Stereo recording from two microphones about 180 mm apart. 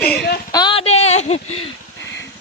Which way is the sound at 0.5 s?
25° left (ahead or behind).